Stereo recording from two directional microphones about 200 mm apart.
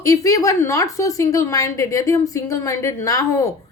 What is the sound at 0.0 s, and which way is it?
Speech, 15° left (ahead or behind).